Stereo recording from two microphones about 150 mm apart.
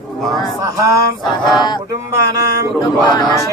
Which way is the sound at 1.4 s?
30° left (ahead or behind).